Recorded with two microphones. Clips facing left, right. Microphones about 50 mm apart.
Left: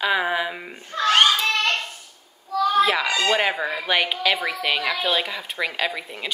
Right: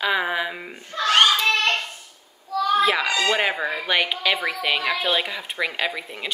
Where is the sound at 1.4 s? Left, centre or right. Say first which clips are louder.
Right 2 dB; right.